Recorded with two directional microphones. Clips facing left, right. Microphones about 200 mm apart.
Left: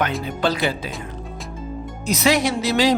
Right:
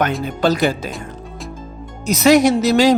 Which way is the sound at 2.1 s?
45° right (ahead or behind).